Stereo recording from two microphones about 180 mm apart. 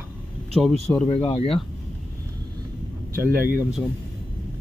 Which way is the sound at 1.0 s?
25° left (ahead or behind).